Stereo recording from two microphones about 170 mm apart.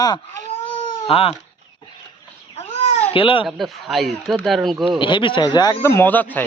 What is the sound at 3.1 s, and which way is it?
Speech, 30° left (ahead or behind).